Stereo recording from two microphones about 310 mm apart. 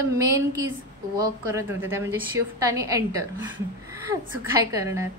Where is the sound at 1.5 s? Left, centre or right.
Centre.